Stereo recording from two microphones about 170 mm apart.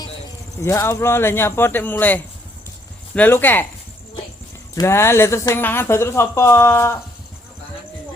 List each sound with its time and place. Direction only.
0.6 s speech: 15° left (ahead or behind)
4.7 s speech: 15° left (ahead or behind)